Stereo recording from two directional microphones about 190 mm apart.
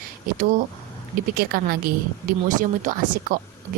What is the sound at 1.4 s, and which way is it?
A woman's voice, 50° right (ahead or behind).